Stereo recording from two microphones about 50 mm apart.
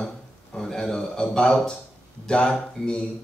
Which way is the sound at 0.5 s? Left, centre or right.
Centre.